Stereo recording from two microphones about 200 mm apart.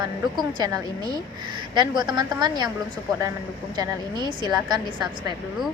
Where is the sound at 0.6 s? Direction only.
20° right (ahead or behind).